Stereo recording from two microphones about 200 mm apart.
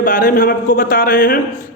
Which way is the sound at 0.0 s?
45° left (ahead or behind).